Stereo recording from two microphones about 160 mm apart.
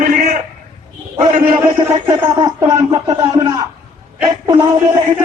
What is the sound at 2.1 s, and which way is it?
Speech, 25° right (ahead or behind).